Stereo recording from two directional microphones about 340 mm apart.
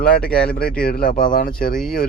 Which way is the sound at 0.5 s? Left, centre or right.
Left.